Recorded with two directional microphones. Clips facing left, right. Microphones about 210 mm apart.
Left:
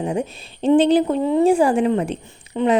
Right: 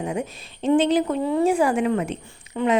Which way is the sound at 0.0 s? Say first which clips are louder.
Left 4 dB; 30° left (ahead or behind).